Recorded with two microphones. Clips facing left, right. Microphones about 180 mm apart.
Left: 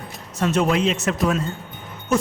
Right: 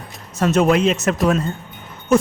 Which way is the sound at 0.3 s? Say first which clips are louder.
Right 4 dB; 45° right (ahead or behind).